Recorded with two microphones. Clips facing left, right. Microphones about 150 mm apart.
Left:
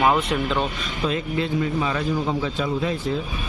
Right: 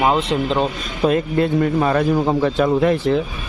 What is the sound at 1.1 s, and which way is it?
A man's voice, 50° right (ahead or behind).